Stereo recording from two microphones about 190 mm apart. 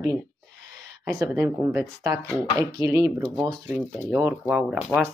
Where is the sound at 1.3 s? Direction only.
10° right (ahead or behind).